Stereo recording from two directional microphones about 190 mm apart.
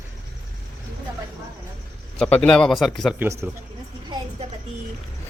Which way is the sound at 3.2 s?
10° right (ahead or behind).